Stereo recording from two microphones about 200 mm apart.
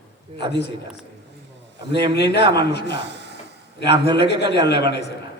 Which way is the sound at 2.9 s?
60° right (ahead or behind).